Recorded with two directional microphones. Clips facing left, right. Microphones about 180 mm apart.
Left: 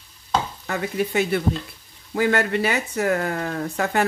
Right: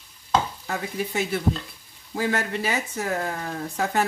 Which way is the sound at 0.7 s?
65° left (ahead or behind).